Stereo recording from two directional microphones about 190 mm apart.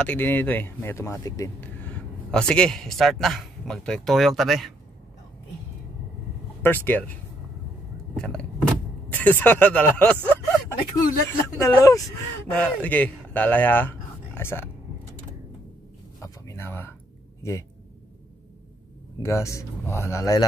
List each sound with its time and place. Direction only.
0.0 s speech: 10° left (ahead or behind)
6.6 s speech: 10° left (ahead or behind)
8.2 s vehicle: 5° left (ahead or behind)
9.2 s speech: 10° left (ahead or behind)
16.2 s a sound: 15° left (ahead or behind)
17.4 s speech: 15° left (ahead or behind)
19.2 s speech: 15° left (ahead or behind)